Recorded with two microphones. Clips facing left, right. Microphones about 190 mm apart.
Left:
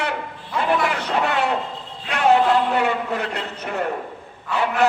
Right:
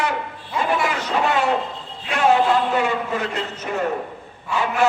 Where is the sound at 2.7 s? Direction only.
60° left (ahead or behind).